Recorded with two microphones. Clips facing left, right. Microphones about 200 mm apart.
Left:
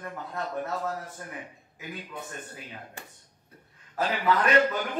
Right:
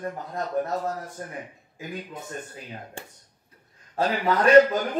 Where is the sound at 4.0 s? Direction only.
40° right (ahead or behind).